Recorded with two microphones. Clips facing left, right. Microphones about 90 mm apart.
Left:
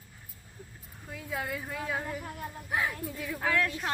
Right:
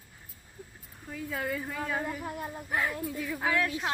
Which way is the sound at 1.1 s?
5° left (ahead or behind).